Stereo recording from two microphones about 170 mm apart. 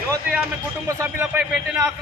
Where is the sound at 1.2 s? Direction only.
15° right (ahead or behind).